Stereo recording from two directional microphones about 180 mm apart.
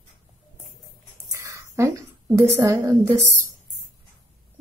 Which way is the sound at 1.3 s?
15° right (ahead or behind).